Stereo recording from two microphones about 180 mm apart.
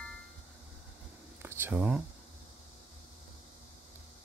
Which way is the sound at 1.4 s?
10° right (ahead or behind).